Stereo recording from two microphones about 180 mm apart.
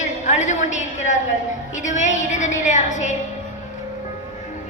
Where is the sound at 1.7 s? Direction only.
40° left (ahead or behind).